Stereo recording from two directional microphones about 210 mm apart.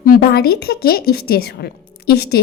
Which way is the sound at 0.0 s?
45° left (ahead or behind).